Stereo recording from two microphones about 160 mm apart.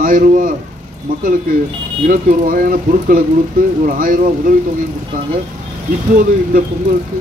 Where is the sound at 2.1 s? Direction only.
60° right (ahead or behind).